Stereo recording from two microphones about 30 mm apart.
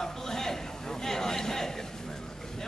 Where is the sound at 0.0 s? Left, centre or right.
Centre.